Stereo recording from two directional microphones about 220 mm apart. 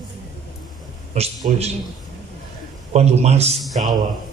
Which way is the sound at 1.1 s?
30° right (ahead or behind).